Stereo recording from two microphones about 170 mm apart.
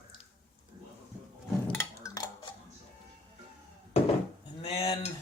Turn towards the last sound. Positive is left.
turn(degrees=35)  # may be behind; listen again after turning